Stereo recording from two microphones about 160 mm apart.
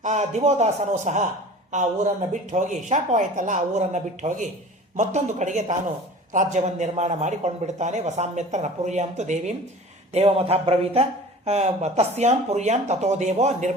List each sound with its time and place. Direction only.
0.0 s a man's voice: 45° right (ahead or behind)
2.3 s a man's voice: 50° right (ahead or behind)